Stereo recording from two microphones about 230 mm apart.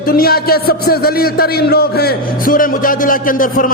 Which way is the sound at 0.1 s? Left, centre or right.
Left.